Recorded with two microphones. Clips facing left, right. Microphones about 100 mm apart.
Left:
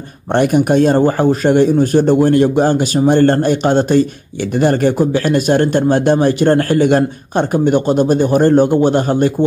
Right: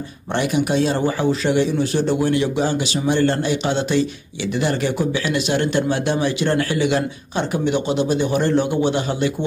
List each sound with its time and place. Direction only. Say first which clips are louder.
0.3 s speech: left 8 dB; 50° left (ahead or behind)